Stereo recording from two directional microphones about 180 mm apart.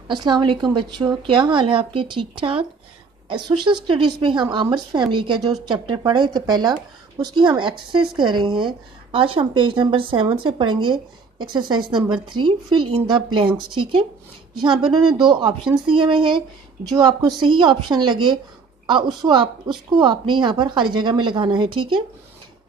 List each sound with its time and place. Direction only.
0.1 s speech: 25° right (ahead or behind)
14.5 s speech: 25° right (ahead or behind)